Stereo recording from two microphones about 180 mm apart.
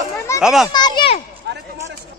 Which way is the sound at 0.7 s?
25° left (ahead or behind).